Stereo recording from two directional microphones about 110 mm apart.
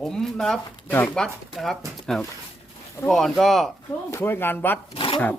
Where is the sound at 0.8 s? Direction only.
15° left (ahead or behind).